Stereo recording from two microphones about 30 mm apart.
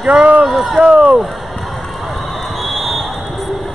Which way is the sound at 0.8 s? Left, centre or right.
Right.